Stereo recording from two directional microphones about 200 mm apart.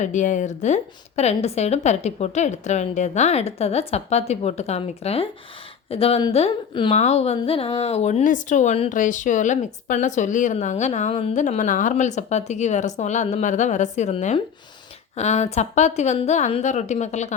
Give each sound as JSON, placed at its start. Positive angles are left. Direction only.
{"t": 0.0, "sound": "a woman's voice", "side_deg": 40}